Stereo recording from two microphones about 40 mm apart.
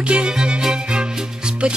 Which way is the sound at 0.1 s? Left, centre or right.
Right.